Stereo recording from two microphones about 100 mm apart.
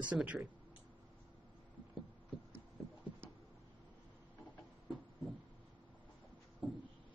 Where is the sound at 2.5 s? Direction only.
25° right (ahead or behind).